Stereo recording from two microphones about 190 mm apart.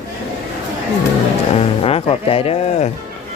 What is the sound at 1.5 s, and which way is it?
Speech, 30° left (ahead or behind).